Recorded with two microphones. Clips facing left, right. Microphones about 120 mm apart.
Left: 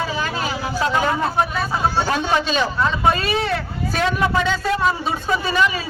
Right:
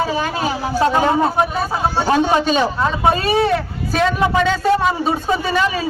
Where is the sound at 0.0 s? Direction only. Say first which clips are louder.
Right 4 dB; 45° right (ahead or behind).